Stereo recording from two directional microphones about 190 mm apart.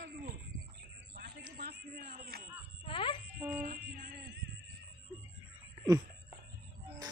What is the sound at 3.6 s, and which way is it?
Music, 50° right (ahead or behind).